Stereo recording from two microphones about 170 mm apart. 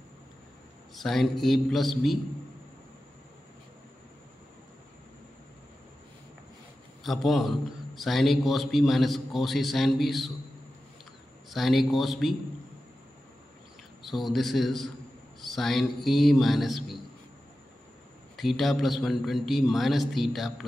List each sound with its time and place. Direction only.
0.9 s a man's voice: centre (ahead or behind)
7.0 s a man's voice: centre (ahead or behind)
11.5 s a man's voice: centre (ahead or behind)
14.0 s a man's voice: centre (ahead or behind)
18.3 s a man's voice: centre (ahead or behind)